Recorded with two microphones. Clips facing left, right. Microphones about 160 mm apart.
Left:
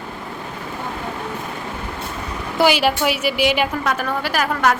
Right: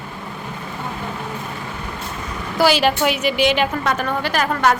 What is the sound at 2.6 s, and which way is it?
A woman's voice, 15° left (ahead or behind).